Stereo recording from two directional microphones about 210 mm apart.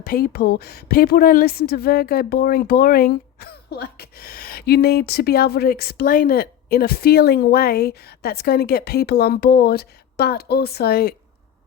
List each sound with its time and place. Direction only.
0.0 s a woman's voice: 45° left (ahead or behind)